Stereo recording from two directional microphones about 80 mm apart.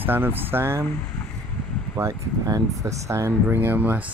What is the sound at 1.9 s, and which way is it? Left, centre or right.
Speech, right.